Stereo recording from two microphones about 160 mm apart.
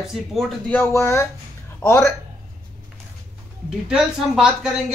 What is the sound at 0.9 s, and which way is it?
Speech, 15° left (ahead or behind).